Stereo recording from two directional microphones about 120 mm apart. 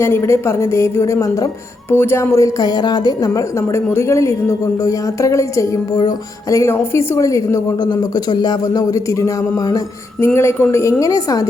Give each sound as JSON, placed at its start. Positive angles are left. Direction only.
{"t": 0.0, "sound": "a woman's voice", "side_deg": 20}